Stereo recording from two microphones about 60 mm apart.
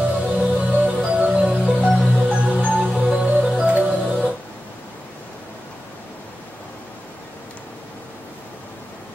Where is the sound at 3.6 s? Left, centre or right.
Right.